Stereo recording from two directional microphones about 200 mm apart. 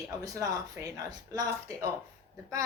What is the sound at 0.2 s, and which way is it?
A woman's voice, 15° right (ahead or behind).